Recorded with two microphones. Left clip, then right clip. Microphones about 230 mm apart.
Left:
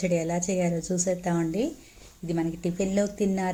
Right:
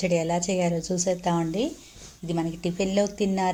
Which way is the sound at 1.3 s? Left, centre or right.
Right.